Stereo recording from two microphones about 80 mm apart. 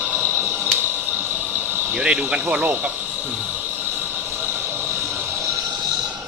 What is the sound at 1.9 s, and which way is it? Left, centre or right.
Speech, centre.